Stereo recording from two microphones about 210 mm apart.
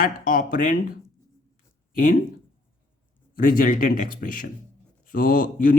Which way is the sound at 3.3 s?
40° left (ahead or behind).